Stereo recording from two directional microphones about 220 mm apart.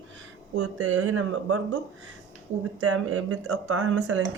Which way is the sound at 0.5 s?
85° right.